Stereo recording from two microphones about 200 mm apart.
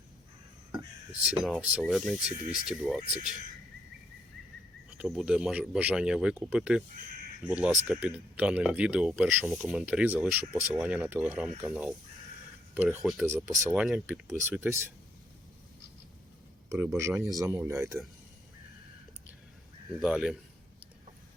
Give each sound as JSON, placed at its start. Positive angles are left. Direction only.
{"t": 0.7, "sound": "a sound", "side_deg": -20}
{"t": 1.2, "sound": "speech", "side_deg": -5}
{"t": 4.9, "sound": "speech", "side_deg": -5}
{"t": 13.7, "sound": "speech", "side_deg": -5}
{"t": 16.6, "sound": "speech", "side_deg": -15}
{"t": 20.0, "sound": "speech", "side_deg": -5}